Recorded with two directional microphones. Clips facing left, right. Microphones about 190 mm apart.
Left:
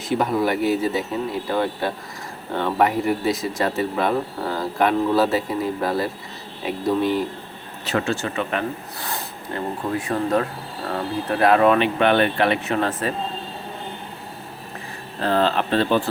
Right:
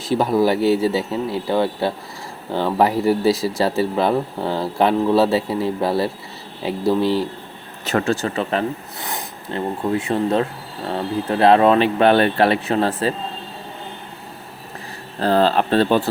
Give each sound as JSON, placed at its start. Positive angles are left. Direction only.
{"t": 0.0, "sound": "speech", "side_deg": -30}
{"t": 7.9, "sound": "speech", "side_deg": -40}
{"t": 9.0, "sound": "speech", "side_deg": -20}
{"t": 15.2, "sound": "speech", "side_deg": -35}